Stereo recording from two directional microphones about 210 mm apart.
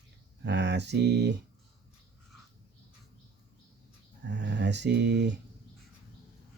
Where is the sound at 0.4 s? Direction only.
55° right (ahead or behind).